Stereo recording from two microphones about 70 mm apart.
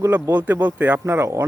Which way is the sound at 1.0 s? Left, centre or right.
Right.